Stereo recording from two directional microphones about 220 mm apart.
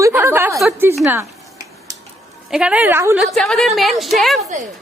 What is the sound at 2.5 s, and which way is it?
Speech, 5° right (ahead or behind).